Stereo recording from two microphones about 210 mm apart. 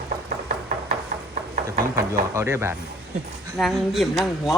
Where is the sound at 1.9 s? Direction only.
10° right (ahead or behind).